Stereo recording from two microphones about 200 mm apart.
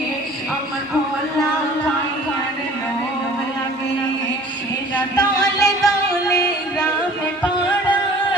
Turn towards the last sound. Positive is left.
turn(degrees=20)  # may be behind; listen again after turning